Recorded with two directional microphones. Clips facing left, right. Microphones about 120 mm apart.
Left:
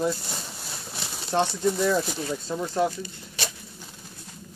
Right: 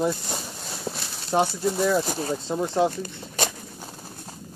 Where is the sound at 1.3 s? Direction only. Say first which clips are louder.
Right 1 dB; 10° right (ahead or behind).